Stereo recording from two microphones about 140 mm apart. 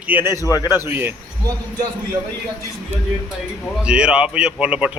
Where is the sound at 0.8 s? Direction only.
15° right (ahead or behind).